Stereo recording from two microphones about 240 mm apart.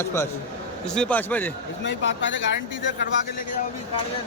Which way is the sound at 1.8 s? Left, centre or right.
Left.